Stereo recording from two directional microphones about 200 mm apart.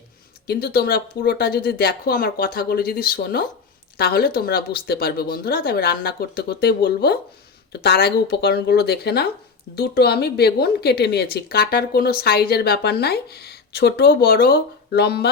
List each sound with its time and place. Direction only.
0.4 s a woman's voice: 50° left (ahead or behind)